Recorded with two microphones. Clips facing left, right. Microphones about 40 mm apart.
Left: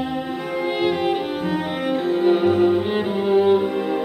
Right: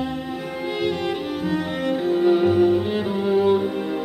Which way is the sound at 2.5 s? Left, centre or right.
Centre.